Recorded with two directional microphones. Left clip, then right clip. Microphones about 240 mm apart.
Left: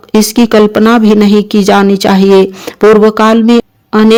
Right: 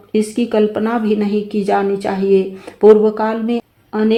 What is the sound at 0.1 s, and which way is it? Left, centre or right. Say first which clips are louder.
A man's voice: left 9 dB; left.